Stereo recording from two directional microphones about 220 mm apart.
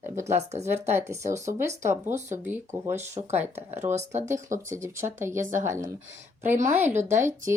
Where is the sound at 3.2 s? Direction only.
25° right (ahead or behind).